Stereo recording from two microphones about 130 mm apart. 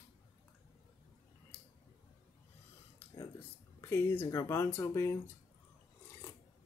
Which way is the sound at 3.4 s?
15° left (ahead or behind).